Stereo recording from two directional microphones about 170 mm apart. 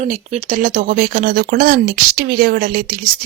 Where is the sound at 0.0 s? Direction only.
45° right (ahead or behind).